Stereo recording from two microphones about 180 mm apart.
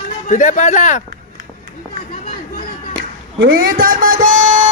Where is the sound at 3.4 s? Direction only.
60° right (ahead or behind).